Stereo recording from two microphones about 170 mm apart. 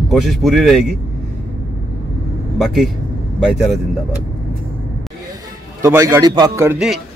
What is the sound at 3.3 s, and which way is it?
Speech, centre (ahead or behind).